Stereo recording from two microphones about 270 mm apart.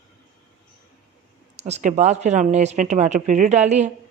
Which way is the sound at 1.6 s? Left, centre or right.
Right.